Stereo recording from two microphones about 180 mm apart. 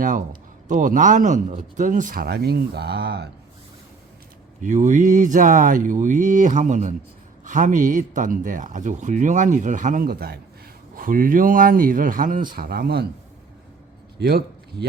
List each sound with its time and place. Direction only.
0.0 s speech: 45° right (ahead or behind); by 3.2 s 65° right (ahead or behind)
4.6 s speech: 45° right (ahead or behind); by 13.1 s 60° right (ahead or behind)
14.2 s a man's voice: 65° right (ahead or behind)